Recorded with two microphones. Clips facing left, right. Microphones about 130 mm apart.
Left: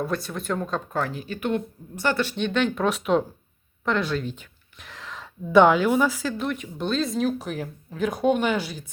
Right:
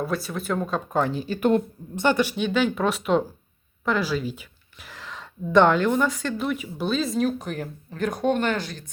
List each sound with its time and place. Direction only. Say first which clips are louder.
0.0 s speech: right 1 dB; centre (ahead or behind)
0.9 s speech: right 7 dB; 20° right (ahead or behind)
1.1 s speech: right 5 dB; 30° right (ahead or behind)
2.0 s speech: right 3 dB; 15° right (ahead or behind); by 8.9 s 5° left (ahead or behind)